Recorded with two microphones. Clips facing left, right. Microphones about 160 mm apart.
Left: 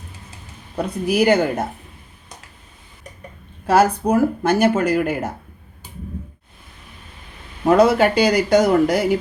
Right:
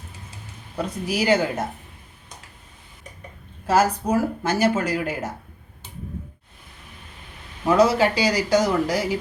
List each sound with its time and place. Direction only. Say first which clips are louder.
1.0 s speech: left 5 dB; 60° left (ahead or behind)
3.7 s speech: left 4 dB; 65° left (ahead or behind)
7.6 s speech: left 4 dB; 60° left (ahead or behind)